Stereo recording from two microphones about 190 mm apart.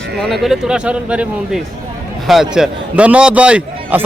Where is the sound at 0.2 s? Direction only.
Centre (ahead or behind).